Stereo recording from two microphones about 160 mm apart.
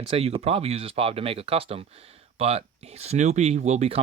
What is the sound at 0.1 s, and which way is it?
Speech, 40° right (ahead or behind).